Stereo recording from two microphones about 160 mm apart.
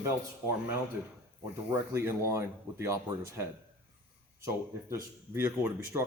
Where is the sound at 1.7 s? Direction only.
15° right (ahead or behind).